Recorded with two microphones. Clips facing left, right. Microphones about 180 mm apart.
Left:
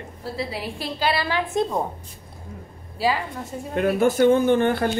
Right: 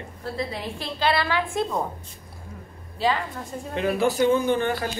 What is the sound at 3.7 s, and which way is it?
Speech, 50° left (ahead or behind).